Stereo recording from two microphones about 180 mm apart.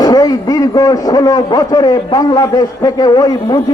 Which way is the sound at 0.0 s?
20° left (ahead or behind).